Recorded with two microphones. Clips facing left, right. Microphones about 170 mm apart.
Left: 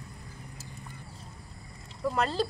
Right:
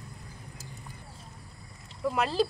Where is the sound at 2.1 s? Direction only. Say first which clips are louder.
Right 1 dB; 5° right (ahead or behind).